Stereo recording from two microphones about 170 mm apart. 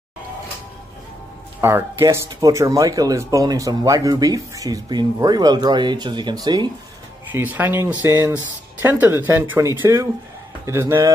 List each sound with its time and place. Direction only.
1.6 s speech: 15° right (ahead or behind)
7.3 s speech: 10° right (ahead or behind)